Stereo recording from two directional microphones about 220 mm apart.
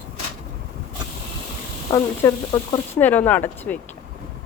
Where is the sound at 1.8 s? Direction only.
15° left (ahead or behind).